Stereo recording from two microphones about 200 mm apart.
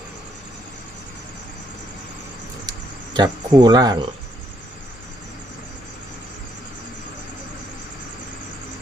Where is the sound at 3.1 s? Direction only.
20° right (ahead or behind).